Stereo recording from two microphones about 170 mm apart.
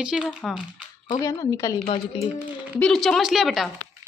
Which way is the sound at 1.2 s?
20° left (ahead or behind).